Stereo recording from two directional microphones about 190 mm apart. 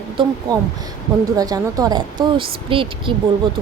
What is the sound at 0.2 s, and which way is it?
Speech, 20° right (ahead or behind).